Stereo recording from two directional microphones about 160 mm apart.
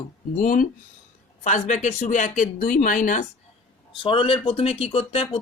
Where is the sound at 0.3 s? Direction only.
60° left (ahead or behind).